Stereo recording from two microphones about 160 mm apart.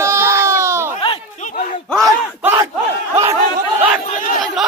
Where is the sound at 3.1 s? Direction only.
15° right (ahead or behind).